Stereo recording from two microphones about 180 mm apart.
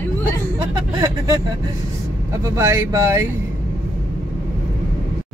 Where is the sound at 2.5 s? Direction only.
15° right (ahead or behind).